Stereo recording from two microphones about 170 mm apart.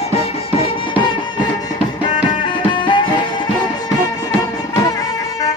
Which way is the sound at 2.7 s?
30° left (ahead or behind).